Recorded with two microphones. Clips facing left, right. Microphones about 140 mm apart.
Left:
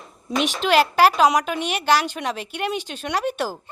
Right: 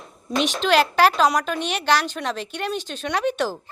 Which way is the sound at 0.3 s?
5° left (ahead or behind).